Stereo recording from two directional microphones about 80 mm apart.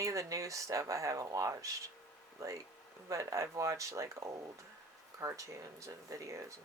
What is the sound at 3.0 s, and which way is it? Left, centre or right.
Speech, right.